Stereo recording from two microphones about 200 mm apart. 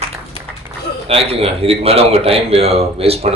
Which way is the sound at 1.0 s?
30° right (ahead or behind).